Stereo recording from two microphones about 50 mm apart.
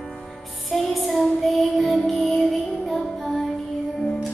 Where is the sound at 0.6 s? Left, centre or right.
Centre.